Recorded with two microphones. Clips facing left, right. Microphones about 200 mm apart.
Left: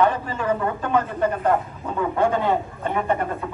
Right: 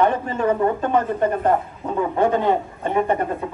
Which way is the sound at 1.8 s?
20° right (ahead or behind).